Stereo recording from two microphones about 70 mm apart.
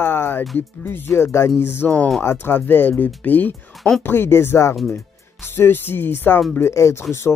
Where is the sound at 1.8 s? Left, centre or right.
Centre.